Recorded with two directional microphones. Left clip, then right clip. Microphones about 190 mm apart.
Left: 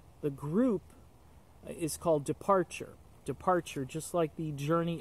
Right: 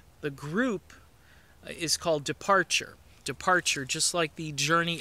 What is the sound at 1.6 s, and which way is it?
Speech, 5° left (ahead or behind).